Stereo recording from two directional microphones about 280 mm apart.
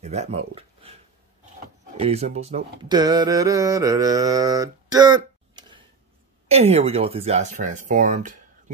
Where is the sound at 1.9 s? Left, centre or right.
Right.